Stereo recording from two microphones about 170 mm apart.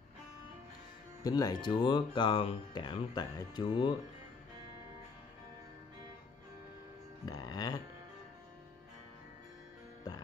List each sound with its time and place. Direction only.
1.2 s speech: 20° left (ahead or behind)
7.2 s music: 20° left (ahead or behind)